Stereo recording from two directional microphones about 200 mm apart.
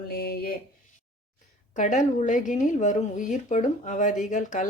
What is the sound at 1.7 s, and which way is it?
Speech, 40° left (ahead or behind).